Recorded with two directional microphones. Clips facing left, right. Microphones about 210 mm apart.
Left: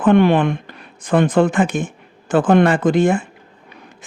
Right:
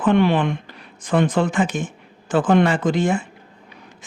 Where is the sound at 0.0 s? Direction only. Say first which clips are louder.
Left 4 dB; 50° left (ahead or behind).